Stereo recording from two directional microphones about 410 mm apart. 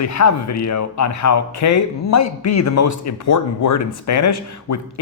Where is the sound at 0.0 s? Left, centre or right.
Left.